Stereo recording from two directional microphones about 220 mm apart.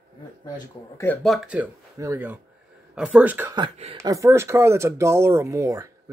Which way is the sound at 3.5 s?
25° right (ahead or behind).